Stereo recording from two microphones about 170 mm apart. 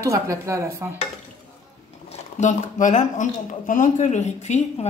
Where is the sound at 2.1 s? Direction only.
45° left (ahead or behind).